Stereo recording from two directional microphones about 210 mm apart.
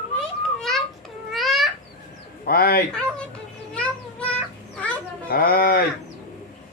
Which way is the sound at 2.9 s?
5° left (ahead or behind).